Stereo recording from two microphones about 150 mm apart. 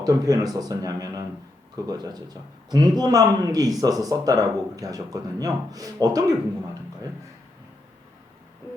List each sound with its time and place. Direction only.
0.0 s speech: 25° right (ahead or behind)